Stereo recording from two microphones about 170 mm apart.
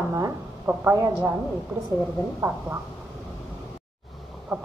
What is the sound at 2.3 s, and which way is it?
Speech, 10° right (ahead or behind).